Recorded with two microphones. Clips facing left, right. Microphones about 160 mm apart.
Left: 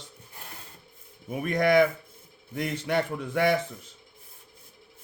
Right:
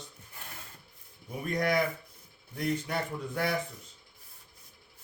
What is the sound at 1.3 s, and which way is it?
A man's voice, 85° left.